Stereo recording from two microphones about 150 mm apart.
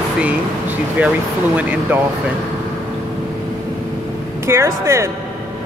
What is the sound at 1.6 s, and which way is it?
Speech, 10° right (ahead or behind).